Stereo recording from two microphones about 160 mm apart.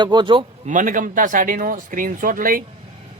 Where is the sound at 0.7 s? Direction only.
55° right (ahead or behind).